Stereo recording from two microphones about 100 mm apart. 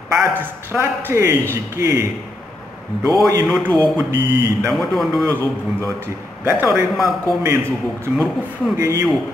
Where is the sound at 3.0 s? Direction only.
40° right (ahead or behind).